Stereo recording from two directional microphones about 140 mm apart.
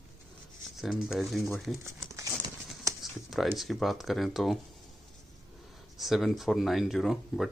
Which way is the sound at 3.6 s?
Centre (ahead or behind).